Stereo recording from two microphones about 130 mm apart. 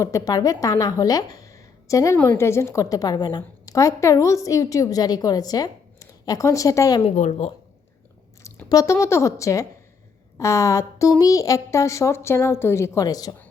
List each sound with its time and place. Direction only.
0.0 s a woman's voice: 25° left (ahead or behind)
3.8 s a woman's voice: 25° left (ahead or behind)
7.0 s speech: 60° left (ahead or behind)
8.4 s a woman's voice: 25° left (ahead or behind)